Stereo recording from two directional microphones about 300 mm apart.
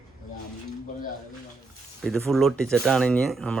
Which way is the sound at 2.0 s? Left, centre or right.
Centre.